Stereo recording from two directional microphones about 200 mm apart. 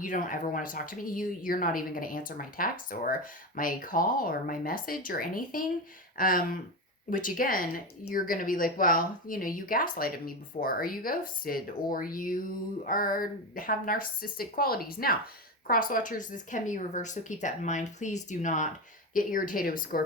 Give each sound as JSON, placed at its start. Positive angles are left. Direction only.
{"t": 0.0, "sound": "a woman's voice", "side_deg": 40}